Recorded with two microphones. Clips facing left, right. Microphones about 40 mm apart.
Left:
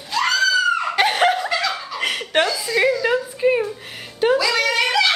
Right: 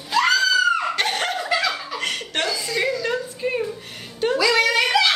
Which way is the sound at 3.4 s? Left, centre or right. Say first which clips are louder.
Left 9 dB; centre.